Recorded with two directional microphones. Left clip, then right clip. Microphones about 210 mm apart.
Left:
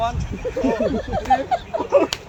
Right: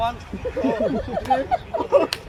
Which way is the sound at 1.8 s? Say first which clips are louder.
Left 1 dB; 15° right (ahead or behind).